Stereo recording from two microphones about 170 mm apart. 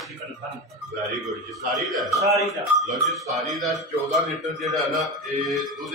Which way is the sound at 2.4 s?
Centre (ahead or behind).